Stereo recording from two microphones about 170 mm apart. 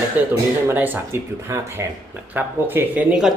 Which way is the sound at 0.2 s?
10° right (ahead or behind).